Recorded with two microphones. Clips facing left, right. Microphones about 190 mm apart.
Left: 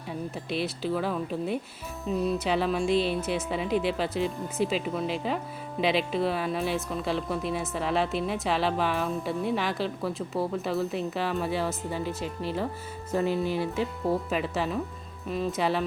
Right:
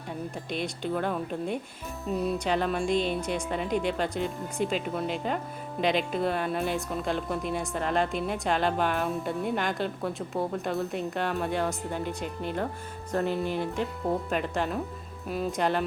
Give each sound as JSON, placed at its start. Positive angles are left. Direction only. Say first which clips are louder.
{"t": 0.5, "sound": "speech", "louder": "left 2 dB", "side_deg": 5}